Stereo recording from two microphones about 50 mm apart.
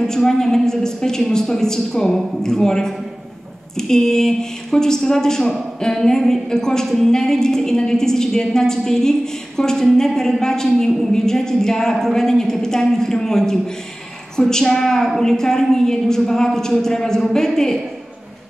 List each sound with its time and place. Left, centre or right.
0.0 s speech: centre